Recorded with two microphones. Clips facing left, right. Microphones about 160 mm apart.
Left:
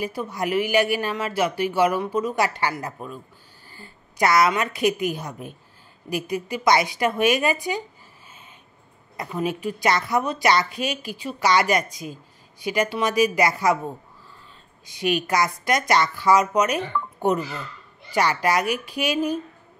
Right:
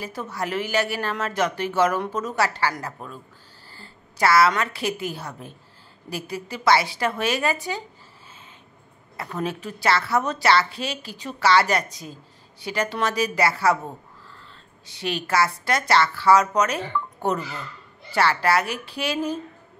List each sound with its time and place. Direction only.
0.0 s a woman's voice: 15° left (ahead or behind)
9.1 s speech: 15° left (ahead or behind)
14.9 s speech: 15° left (ahead or behind)